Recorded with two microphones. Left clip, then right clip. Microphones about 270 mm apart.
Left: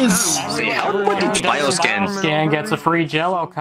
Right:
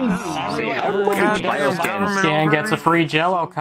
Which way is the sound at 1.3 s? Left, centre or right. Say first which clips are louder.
Left 1 dB; left.